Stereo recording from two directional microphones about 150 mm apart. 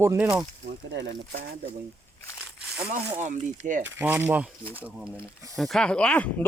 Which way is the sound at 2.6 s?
5° right (ahead or behind).